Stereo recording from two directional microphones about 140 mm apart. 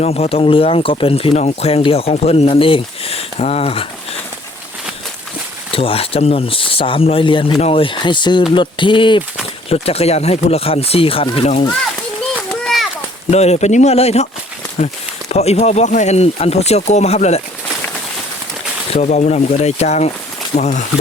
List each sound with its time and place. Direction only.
0.0 s speech: 45° left (ahead or behind)
5.7 s speech: 40° left (ahead or behind)
12.6 s a sound: centre (ahead or behind)
13.3 s speech: 50° left (ahead or behind)
15.3 s speech: 50° left (ahead or behind)
18.9 s speech: 55° left (ahead or behind)